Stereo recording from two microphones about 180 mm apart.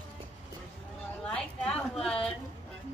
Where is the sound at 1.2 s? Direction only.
5° left (ahead or behind).